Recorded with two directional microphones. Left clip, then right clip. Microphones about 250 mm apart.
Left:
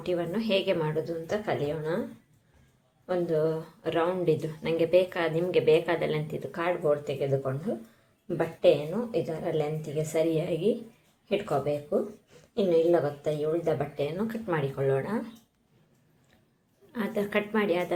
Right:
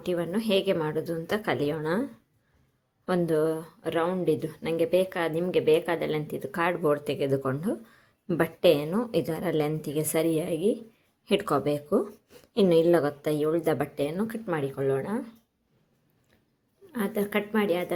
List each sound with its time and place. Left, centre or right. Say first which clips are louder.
0.0 s speech: right 1 dB; right
3.1 s a woman's voice: right 1 dB; right
11.3 s a woman's voice: right 2 dB; right
16.9 s speech: even; right